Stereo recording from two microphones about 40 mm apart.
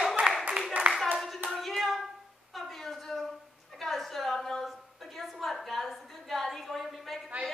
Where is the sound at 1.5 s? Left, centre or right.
Centre.